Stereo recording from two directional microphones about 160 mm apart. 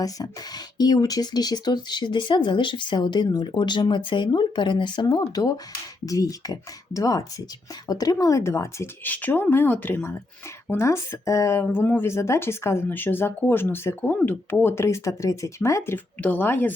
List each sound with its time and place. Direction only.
0.0 s speech: 25° left (ahead or behind)